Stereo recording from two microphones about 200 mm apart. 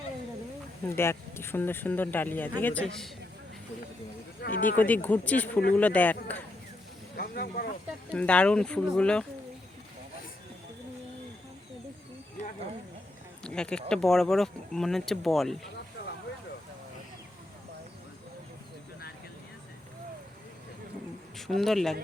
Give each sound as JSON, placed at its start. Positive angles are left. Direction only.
{"t": 0.9, "sound": "speech", "side_deg": 10}
{"t": 4.4, "sound": "speech", "side_deg": 45}
{"t": 4.8, "sound": "speech", "side_deg": 10}
{"t": 7.2, "sound": "snake", "side_deg": 45}
{"t": 8.1, "sound": "speech", "side_deg": 5}
{"t": 13.4, "sound": "speech", "side_deg": 5}
{"t": 21.3, "sound": "speech", "side_deg": 0}